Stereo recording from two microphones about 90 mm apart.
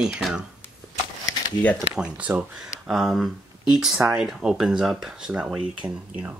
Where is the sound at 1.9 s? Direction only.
15° right (ahead or behind).